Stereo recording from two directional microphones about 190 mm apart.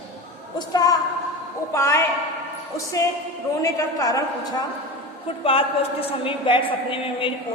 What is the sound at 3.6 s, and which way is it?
A man's voice, 15° left (ahead or behind).